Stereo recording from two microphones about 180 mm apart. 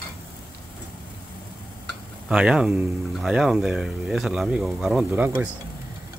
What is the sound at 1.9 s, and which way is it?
Speech, 5° right (ahead or behind).